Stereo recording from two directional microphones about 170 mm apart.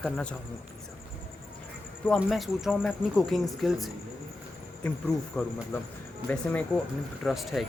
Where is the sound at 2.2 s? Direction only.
Centre (ahead or behind).